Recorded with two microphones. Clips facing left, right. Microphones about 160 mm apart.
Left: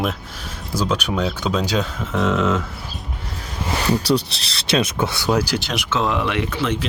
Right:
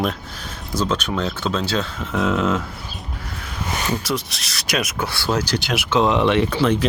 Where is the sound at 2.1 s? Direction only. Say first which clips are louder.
Even; centre (ahead or behind).